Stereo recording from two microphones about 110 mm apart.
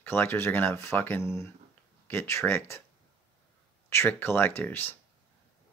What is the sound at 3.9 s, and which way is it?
Speech, 20° left (ahead or behind).